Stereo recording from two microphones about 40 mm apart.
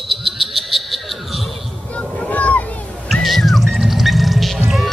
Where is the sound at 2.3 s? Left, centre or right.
Left.